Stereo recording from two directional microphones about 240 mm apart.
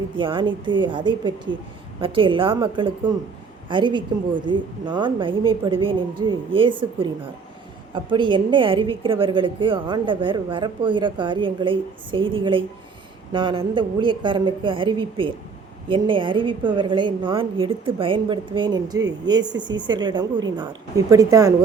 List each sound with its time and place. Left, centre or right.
0.2 s a woman's voice: right